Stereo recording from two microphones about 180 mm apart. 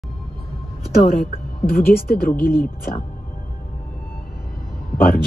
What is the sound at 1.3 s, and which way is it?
Speech, 55° left (ahead or behind).